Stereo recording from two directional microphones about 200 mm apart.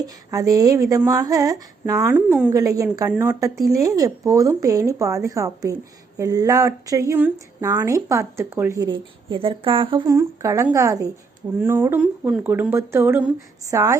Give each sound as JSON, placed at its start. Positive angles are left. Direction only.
{"t": 0.0, "sound": "speech", "side_deg": -15}
{"t": 2.5, "sound": "speech", "side_deg": -15}
{"t": 10.2, "sound": "speech", "side_deg": -15}